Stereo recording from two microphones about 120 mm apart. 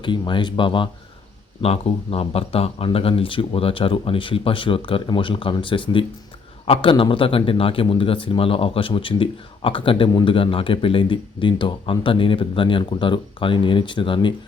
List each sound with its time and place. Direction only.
0.0 s speech: 40° left (ahead or behind)
1.6 s speech: 55° left (ahead or behind)